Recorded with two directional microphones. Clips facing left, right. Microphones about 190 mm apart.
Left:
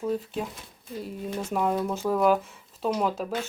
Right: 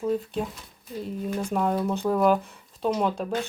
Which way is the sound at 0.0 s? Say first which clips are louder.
Right 2 dB; centre (ahead or behind).